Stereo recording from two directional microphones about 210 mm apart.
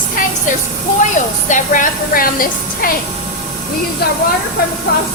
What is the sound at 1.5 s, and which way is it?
A woman's voice, 40° left (ahead or behind).